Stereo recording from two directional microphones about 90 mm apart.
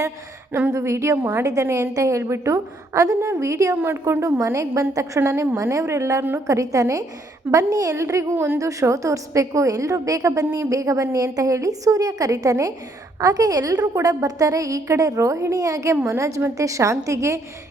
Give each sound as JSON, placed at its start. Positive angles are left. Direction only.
{"t": 0.7, "sound": "a woman's voice", "side_deg": -35}